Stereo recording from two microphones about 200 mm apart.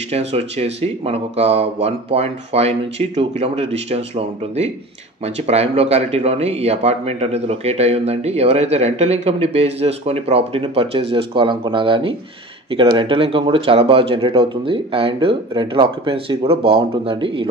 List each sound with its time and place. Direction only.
0.1 s speech: 30° right (ahead or behind)